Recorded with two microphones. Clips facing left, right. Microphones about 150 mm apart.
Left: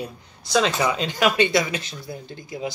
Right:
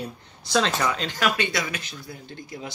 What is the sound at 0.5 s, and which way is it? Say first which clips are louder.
Speech: left 3 dB; 10° left (ahead or behind).